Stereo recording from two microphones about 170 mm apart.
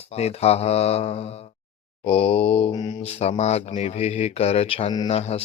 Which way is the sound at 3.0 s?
40° left (ahead or behind).